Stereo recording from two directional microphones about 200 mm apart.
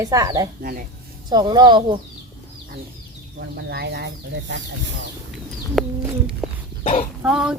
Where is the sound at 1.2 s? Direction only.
20° right (ahead or behind).